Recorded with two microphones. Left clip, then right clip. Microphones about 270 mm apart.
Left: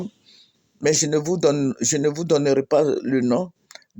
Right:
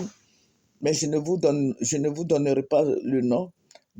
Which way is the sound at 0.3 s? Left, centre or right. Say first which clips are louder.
Left 12 dB; centre.